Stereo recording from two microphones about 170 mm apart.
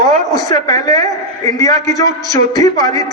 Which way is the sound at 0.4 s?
20° left (ahead or behind).